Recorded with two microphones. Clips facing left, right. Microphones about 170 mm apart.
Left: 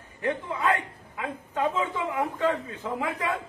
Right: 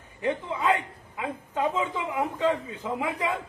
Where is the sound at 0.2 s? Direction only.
20° right (ahead or behind).